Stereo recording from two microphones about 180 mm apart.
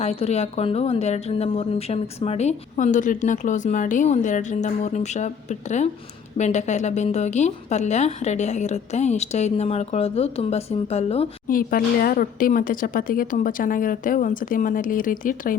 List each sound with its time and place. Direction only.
0.0 s a woman's voice: 35° left (ahead or behind)
11.4 s speech: 50° left (ahead or behind)